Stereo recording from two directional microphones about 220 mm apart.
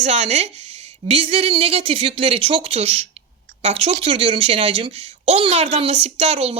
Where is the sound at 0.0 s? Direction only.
30° right (ahead or behind).